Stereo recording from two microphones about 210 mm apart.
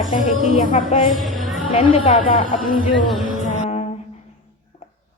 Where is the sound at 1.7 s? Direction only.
25° left (ahead or behind).